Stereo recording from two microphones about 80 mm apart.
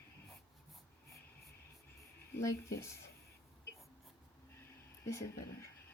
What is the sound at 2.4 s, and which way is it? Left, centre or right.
Speech, left.